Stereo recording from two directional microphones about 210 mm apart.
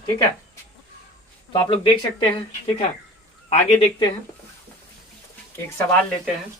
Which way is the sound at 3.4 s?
30° left (ahead or behind).